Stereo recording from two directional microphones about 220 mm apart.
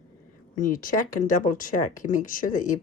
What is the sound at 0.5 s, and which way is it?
Speech, 35° left (ahead or behind).